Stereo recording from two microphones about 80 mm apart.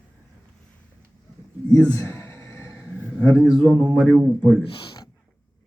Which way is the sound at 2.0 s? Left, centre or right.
Left.